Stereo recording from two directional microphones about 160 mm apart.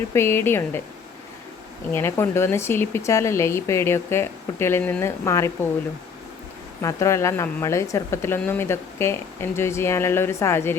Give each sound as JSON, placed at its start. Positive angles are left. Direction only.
{"t": 0.1, "sound": "speech", "side_deg": 15}
{"t": 1.9, "sound": "speech", "side_deg": 15}
{"t": 6.8, "sound": "speech", "side_deg": 20}